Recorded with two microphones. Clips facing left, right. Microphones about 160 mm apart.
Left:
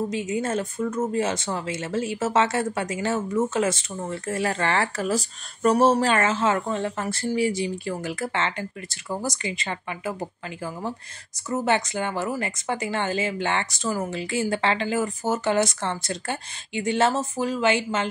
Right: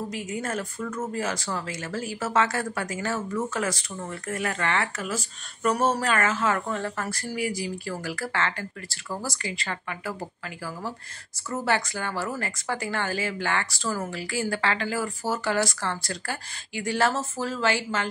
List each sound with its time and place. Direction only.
0.1 s speech: 25° left (ahead or behind)
11.5 s speech: 20° left (ahead or behind)